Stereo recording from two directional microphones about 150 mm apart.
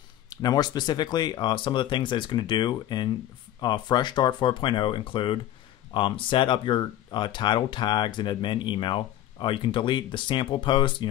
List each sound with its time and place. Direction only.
0.3 s speech: 25° left (ahead or behind)